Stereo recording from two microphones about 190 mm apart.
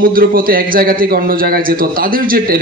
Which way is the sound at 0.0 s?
50° right (ahead or behind).